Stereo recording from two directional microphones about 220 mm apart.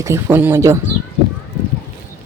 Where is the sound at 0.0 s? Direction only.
10° right (ahead or behind).